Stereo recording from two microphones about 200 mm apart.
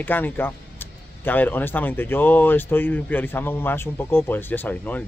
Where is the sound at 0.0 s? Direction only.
10° left (ahead or behind).